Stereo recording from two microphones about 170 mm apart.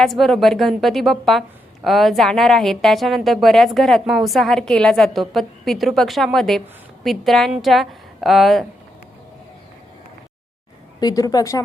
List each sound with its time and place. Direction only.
0.0 s a woman's voice: centre (ahead or behind)
11.0 s a woman's voice: 20° left (ahead or behind)